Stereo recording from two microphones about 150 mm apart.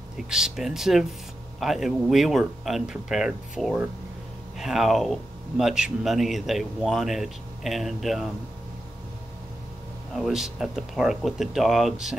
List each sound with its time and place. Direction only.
0.3 s speech: 5° right (ahead or behind)
10.1 s speech: centre (ahead or behind)